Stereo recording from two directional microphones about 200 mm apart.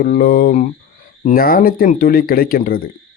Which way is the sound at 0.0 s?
50° left (ahead or behind).